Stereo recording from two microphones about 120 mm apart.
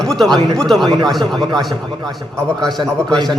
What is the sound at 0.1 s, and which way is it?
Speech, 5° left (ahead or behind).